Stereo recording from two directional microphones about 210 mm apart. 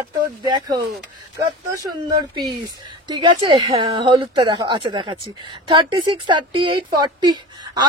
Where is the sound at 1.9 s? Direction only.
20° right (ahead or behind).